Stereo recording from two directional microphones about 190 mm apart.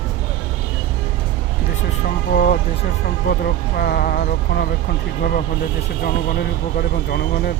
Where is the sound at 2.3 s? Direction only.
50° left (ahead or behind).